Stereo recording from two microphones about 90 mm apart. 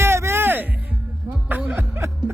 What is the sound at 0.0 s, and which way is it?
Music, 25° right (ahead or behind).